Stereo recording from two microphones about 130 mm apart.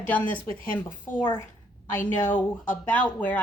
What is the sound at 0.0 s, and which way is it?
Speech, 15° left (ahead or behind).